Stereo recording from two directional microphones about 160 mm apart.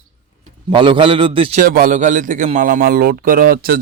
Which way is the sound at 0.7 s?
30° right (ahead or behind).